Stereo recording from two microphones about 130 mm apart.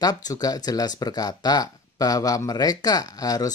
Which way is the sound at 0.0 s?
30° left (ahead or behind).